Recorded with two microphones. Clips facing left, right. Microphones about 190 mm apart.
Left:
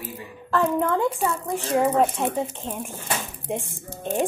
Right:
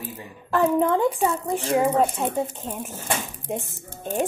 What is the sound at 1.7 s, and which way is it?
Speech, centre (ahead or behind).